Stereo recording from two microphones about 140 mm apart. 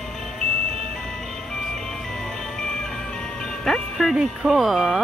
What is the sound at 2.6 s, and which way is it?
Music, 5° left (ahead or behind).